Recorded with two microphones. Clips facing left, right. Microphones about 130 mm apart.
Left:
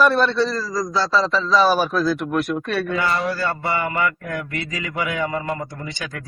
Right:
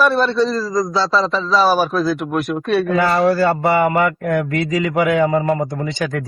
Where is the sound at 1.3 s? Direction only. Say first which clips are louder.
Right 2 dB; 5° right (ahead or behind).